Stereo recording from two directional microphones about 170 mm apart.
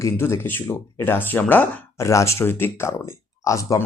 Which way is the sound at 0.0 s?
15° left (ahead or behind).